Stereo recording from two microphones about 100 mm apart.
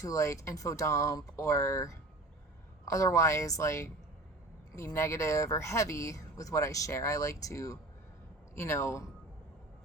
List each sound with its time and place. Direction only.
0.0 s speech: 30° left (ahead or behind)